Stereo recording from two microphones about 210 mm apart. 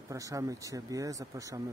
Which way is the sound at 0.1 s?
15° right (ahead or behind).